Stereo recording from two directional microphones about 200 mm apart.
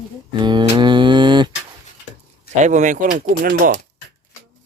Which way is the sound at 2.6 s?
40° right (ahead or behind).